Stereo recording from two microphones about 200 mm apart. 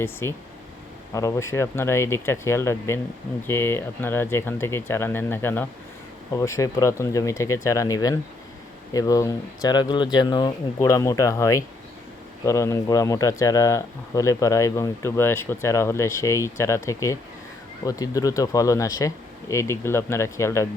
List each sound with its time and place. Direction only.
0.0 s speech: 10° left (ahead or behind)